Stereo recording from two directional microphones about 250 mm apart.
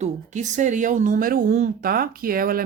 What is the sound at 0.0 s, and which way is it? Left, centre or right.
Speech, right.